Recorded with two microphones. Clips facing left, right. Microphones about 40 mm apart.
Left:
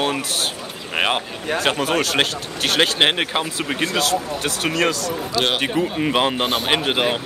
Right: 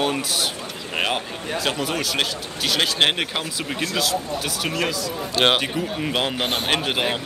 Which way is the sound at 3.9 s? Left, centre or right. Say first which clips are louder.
Left 3 dB; left.